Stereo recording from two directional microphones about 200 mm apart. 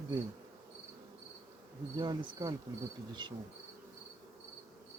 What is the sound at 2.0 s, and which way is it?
Insect, 20° right (ahead or behind).